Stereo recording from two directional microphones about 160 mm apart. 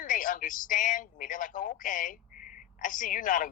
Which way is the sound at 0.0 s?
55° left (ahead or behind).